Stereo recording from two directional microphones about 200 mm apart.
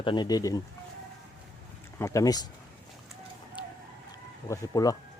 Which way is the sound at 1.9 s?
15° left (ahead or behind).